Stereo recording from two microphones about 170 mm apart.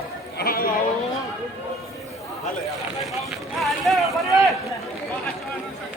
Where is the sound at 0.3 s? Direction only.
60° left (ahead or behind).